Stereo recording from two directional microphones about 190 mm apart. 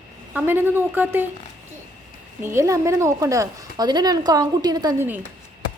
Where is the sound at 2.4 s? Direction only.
15° right (ahead or behind).